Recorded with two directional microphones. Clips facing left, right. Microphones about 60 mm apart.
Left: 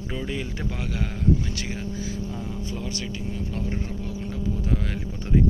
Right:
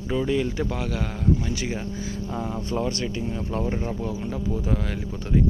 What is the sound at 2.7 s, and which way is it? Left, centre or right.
Speech, right.